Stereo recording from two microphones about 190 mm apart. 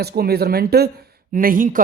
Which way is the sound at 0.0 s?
55° right (ahead or behind).